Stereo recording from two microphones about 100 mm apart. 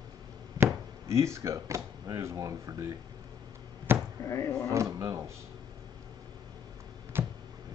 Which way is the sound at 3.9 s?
20° right (ahead or behind).